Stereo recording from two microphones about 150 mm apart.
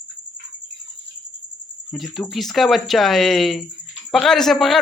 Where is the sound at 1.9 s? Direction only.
Centre (ahead or behind).